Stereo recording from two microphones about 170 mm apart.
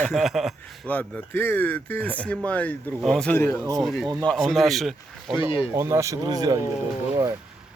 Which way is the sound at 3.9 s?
Centre (ahead or behind).